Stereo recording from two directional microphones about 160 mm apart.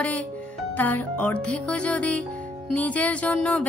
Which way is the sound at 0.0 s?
10° left (ahead or behind).